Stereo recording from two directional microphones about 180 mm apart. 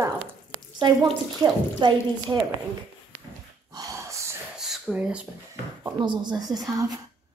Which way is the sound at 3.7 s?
20° right (ahead or behind).